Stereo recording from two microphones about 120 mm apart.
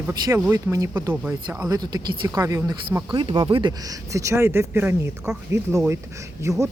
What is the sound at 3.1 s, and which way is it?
Speech, 40° right (ahead or behind).